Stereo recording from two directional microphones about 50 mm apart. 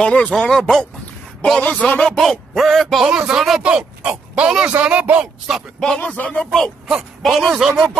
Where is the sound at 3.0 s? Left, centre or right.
Right.